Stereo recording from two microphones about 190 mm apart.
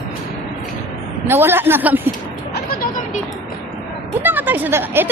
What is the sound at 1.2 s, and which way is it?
Speech, 10° right (ahead or behind).